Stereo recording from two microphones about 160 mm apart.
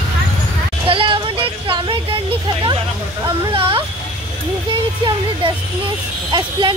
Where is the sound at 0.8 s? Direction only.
35° right (ahead or behind).